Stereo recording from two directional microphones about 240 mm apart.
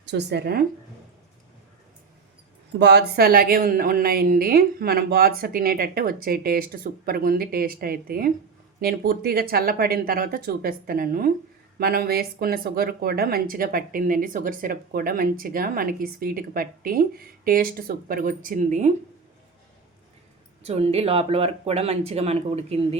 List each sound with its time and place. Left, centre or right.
0.0 s speech: right
2.7 s speech: right
20.7 s speech: right